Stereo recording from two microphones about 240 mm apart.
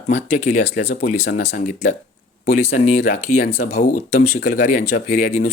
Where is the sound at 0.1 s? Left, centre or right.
Left.